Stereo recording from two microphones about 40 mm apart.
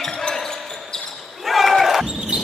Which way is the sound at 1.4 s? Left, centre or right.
Centre.